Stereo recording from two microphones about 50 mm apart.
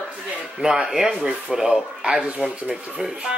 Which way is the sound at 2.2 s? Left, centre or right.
Right.